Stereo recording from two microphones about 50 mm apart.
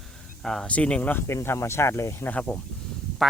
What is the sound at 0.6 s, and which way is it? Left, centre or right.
Speech, left.